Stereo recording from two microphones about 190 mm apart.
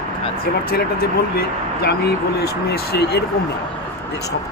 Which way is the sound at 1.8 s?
55° left (ahead or behind).